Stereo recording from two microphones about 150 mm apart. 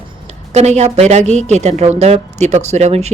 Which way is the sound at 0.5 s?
50° right (ahead or behind).